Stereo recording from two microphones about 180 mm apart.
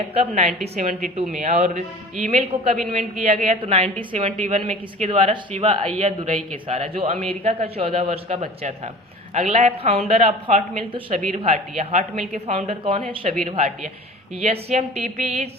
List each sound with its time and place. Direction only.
0.3 s a man's voice: 40° right (ahead or behind)